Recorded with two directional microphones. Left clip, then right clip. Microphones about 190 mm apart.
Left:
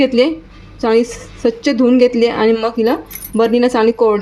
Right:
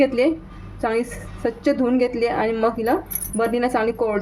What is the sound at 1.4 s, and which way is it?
A woman's voice, 35° left (ahead or behind).